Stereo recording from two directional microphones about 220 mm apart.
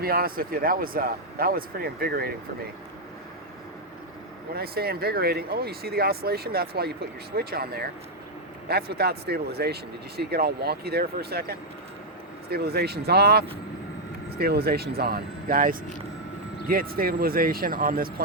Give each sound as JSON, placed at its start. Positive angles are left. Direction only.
{"t": 0.0, "sound": "speech", "side_deg": -45}
{"t": 4.5, "sound": "speech", "side_deg": -45}